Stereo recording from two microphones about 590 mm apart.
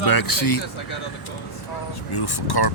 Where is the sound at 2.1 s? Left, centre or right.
Left.